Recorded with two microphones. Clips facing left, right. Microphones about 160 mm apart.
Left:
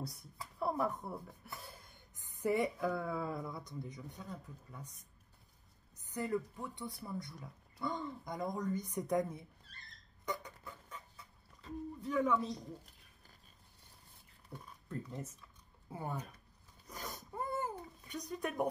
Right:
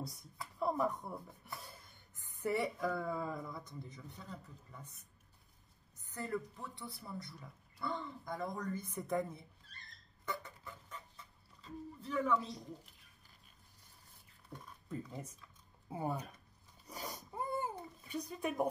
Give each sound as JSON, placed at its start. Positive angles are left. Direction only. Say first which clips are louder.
{"t": 0.0, "sound": "speech", "louder": "even", "side_deg": 5}
{"t": 6.1, "sound": "speech", "louder": "left 3 dB", "side_deg": 10}
{"t": 10.4, "sound": "dog", "louder": "left 1 dB", "side_deg": 10}
{"t": 12.0, "sound": "speech", "louder": "left 1 dB", "side_deg": 10}
{"t": 14.5, "sound": "speech", "louder": "left 1 dB", "side_deg": 10}
{"t": 14.9, "sound": "speech", "louder": "left 1 dB", "side_deg": -5}
{"t": 16.8, "sound": "babbling", "louder": "right 1 dB", "side_deg": -10}